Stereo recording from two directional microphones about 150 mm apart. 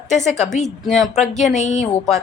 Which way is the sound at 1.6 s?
50° left (ahead or behind).